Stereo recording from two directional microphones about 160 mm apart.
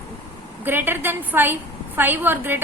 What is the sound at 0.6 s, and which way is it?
A woman's voice, 15° right (ahead or behind).